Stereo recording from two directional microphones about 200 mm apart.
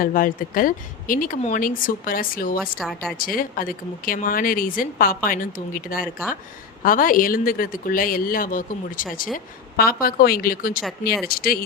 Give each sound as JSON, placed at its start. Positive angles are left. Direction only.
{"t": 0.0, "sound": "speech", "side_deg": 45}
{"t": 2.7, "sound": "speech", "side_deg": 0}
{"t": 3.2, "sound": "speech", "side_deg": 45}